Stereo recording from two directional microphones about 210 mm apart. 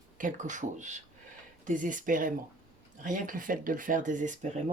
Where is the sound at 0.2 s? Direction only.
35° right (ahead or behind).